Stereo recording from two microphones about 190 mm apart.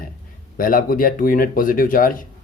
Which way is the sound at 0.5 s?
45° left (ahead or behind).